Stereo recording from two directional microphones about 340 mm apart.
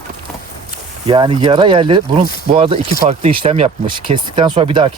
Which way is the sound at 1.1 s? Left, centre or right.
Centre.